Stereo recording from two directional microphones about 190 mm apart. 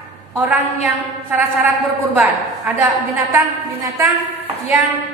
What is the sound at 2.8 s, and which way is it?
Speech, 10° right (ahead or behind).